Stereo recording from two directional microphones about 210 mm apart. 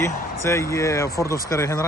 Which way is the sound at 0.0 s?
15° left (ahead or behind).